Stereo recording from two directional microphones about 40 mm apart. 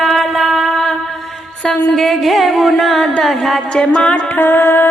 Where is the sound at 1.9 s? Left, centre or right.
Centre.